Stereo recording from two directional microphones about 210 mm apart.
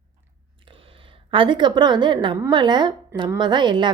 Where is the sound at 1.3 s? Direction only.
25° right (ahead or behind).